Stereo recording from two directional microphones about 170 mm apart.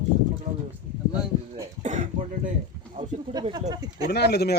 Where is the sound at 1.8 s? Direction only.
45° right (ahead or behind).